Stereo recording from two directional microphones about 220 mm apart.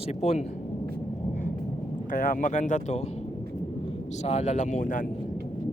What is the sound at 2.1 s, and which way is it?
Speech, 35° left (ahead or behind).